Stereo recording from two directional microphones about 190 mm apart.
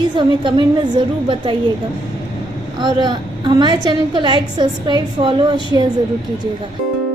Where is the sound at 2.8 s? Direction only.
25° right (ahead or behind).